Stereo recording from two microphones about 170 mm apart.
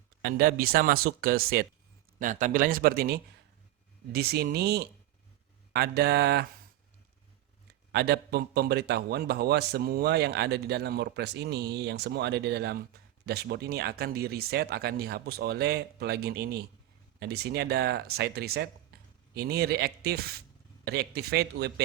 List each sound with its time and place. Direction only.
0.2 s speech: 60° right (ahead or behind)
2.1 s a man's voice: 50° right (ahead or behind); by 6.4 s 75° right (ahead or behind)
7.9 s a man's voice: 75° right (ahead or behind)